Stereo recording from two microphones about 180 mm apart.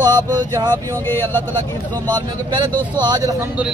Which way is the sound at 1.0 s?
15° left (ahead or behind).